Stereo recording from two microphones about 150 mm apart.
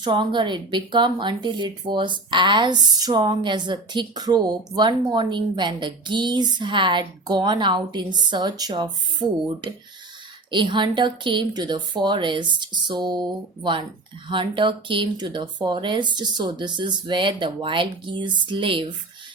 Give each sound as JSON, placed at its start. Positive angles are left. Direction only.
{"t": 0.0, "sound": "speech", "side_deg": -30}